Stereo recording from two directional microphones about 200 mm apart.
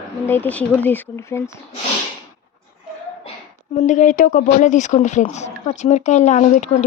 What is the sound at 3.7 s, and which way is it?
Speech, 40° left (ahead or behind).